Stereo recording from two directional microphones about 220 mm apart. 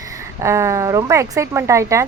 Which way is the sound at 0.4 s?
15° right (ahead or behind).